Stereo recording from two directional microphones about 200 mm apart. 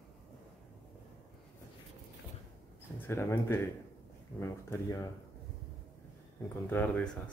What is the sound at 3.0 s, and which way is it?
Speech, 10° left (ahead or behind).